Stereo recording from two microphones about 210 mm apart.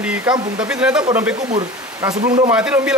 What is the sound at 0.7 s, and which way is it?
Speech, 5° right (ahead or behind).